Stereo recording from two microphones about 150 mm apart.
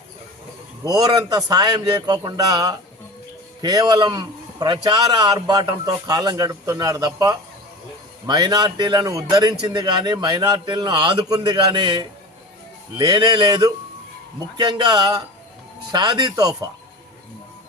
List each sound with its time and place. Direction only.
0.9 s a man's voice: 25° right (ahead or behind)